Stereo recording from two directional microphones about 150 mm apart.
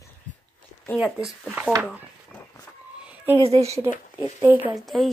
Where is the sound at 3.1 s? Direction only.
15° right (ahead or behind).